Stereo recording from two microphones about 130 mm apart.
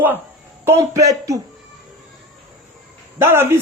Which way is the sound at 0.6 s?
20° right (ahead or behind).